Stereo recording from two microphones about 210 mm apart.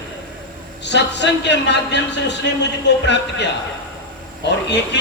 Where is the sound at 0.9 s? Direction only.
55° left (ahead or behind).